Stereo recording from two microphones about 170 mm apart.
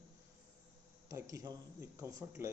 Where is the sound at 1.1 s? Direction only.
20° right (ahead or behind).